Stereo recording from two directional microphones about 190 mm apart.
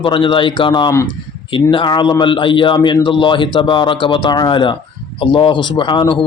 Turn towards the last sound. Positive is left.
turn(degrees=25)  # may be behind; listen again after turning